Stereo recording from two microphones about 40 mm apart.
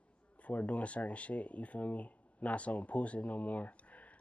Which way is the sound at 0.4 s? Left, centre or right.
Left.